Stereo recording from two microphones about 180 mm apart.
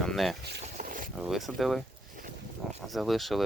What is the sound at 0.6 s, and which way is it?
Boat, 45° right (ahead or behind).